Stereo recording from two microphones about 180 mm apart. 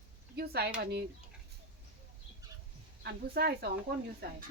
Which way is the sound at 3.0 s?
60° right (ahead or behind).